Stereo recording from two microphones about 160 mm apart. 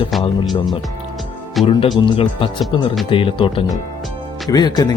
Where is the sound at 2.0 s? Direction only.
30° left (ahead or behind).